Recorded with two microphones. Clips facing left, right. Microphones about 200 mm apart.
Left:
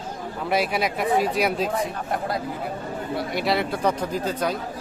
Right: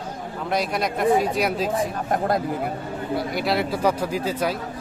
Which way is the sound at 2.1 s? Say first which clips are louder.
Right 7 dB; 50° right (ahead or behind).